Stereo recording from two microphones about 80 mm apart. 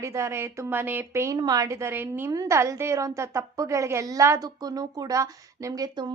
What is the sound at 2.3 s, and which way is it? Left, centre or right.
A woman's voice, right.